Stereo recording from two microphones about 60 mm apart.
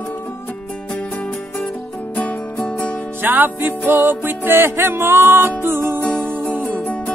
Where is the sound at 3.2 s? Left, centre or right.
Right.